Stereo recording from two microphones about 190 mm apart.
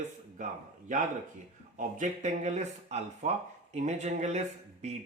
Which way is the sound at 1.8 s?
40° right (ahead or behind).